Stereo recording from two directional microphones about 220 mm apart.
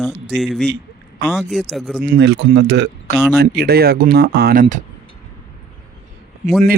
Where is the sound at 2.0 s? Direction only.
45° right (ahead or behind).